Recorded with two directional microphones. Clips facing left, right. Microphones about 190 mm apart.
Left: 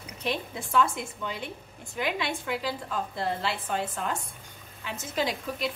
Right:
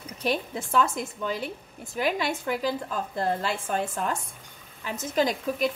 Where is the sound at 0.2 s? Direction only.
40° right (ahead or behind).